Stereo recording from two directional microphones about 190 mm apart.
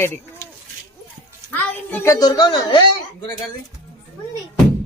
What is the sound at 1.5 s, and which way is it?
A woman's voice, 10° left (ahead or behind).